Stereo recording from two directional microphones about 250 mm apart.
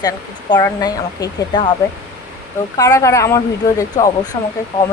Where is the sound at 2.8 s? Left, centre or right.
Centre.